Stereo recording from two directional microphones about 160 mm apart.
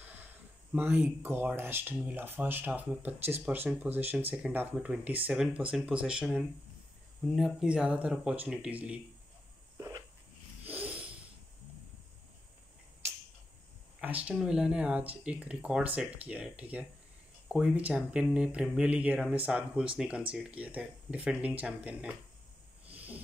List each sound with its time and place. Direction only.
0.0 s speech: 10° right (ahead or behind)
9.8 s a sound: 20° right (ahead or behind)
10.7 s snort: 10° right (ahead or behind)
14.0 s speech: 10° right (ahead or behind)
22.9 s hiss: 10° right (ahead or behind)